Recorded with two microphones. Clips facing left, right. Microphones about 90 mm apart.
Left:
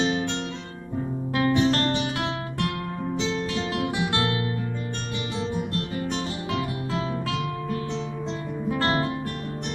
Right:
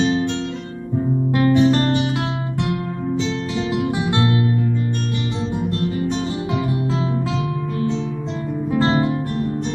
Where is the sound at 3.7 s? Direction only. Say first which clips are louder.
Right 7 dB; 20° right (ahead or behind).